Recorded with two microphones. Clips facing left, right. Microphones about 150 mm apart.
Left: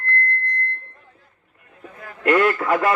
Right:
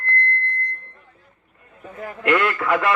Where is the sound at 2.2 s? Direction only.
40° left (ahead or behind).